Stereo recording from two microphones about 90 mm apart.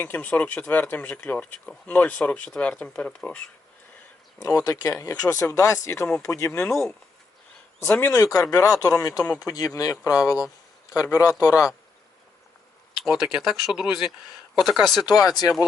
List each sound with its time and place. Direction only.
0.0 s speech: 20° left (ahead or behind)
4.4 s speech: 40° left (ahead or behind)
7.8 s speech: 25° left (ahead or behind)
8.1 s speech: 40° left (ahead or behind)
13.1 s speech: 5° right (ahead or behind)
15.3 s speech: 50° left (ahead or behind)